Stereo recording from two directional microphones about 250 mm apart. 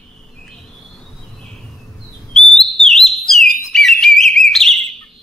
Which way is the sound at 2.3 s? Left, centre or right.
Centre.